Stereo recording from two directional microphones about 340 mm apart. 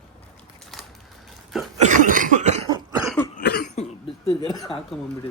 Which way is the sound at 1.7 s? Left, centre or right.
Right.